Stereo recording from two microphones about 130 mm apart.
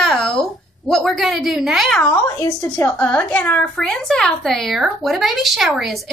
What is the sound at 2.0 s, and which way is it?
A woman's voice, 25° left (ahead or behind).